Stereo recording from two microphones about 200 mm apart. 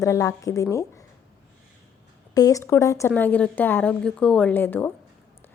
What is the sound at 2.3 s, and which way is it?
A woman's voice, 15° left (ahead or behind).